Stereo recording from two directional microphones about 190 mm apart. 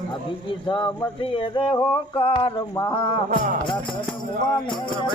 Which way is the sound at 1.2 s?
30° left (ahead or behind).